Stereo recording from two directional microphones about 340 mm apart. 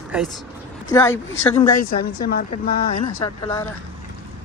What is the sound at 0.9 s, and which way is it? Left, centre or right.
Speech, centre.